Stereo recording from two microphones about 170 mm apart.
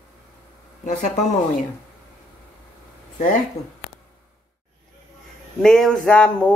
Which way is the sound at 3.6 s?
20° left (ahead or behind).